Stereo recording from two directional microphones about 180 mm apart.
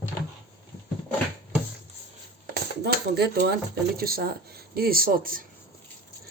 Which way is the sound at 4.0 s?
55° right (ahead or behind).